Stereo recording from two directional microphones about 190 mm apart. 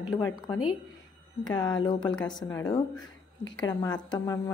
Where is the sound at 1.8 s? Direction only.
20° left (ahead or behind).